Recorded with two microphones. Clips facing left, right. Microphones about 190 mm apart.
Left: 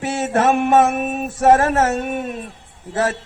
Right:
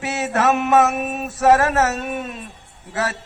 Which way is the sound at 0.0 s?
50° left (ahead or behind).